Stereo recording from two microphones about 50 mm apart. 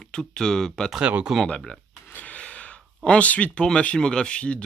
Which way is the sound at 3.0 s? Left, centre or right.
Left.